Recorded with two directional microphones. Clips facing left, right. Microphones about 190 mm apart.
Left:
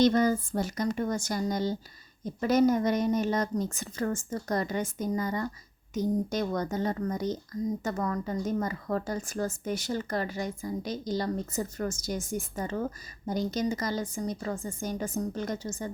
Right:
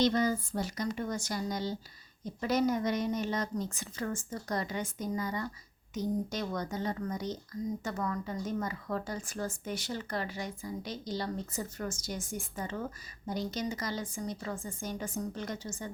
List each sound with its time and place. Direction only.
0.0 s speech: 50° left (ahead or behind)